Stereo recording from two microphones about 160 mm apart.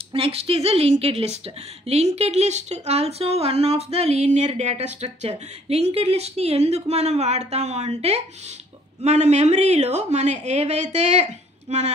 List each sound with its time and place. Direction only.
0.1 s a woman's voice: 35° right (ahead or behind)